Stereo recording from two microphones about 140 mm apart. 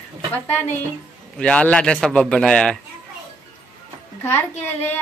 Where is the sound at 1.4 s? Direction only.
5° left (ahead or behind).